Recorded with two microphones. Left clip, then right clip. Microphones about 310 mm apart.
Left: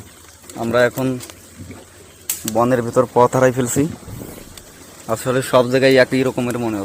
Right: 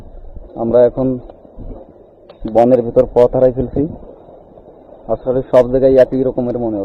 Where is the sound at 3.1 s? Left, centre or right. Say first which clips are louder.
Right 1 dB; left.